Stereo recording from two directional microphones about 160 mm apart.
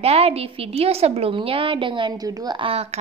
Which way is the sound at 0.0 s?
40° right (ahead or behind).